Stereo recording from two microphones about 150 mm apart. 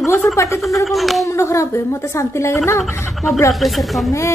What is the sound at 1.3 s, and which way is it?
A woman's voice, 20° left (ahead or behind).